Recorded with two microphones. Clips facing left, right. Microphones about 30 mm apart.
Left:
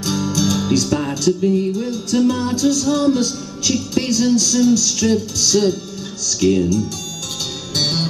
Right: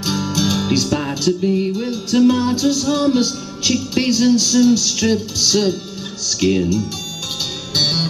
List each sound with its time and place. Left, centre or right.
0.0 s music: centre